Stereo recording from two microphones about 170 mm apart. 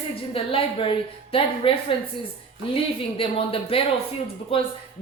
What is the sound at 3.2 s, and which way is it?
A woman's voice, 35° left (ahead or behind).